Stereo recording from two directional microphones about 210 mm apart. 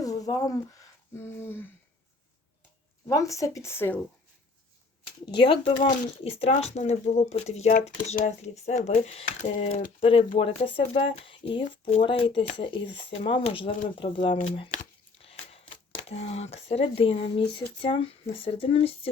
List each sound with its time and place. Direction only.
0.0 s a sound: 15° left (ahead or behind)
1.1 s speech: 10° left (ahead or behind)
3.1 s speech: 15° left (ahead or behind)
5.2 s speech: 25° left (ahead or behind)
15.2 s a sound: 25° left (ahead or behind)
16.0 s speech: 30° left (ahead or behind)